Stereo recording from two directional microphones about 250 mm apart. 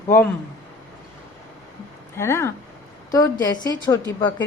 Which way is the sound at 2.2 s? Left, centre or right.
Centre.